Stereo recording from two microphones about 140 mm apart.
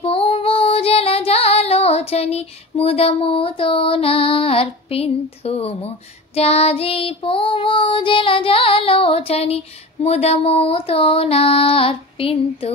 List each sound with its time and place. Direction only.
0.0 s female singing: 40° left (ahead or behind)
6.3 s music: 45° left (ahead or behind)
10.0 s mantra: 50° left (ahead or behind)